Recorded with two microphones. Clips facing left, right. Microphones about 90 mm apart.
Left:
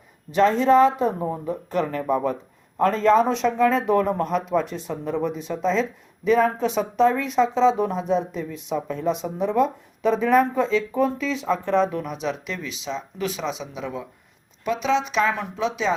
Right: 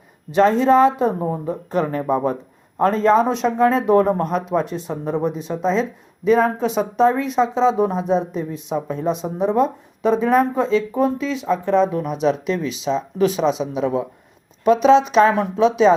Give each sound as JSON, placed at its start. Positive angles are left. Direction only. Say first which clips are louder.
{"t": 0.3, "sound": "speech", "louder": "right 3 dB", "side_deg": -20}
{"t": 3.9, "sound": "speech", "louder": "right 4 dB", "side_deg": -30}
{"t": 6.7, "sound": "speech", "louder": "right 3 dB", "side_deg": -20}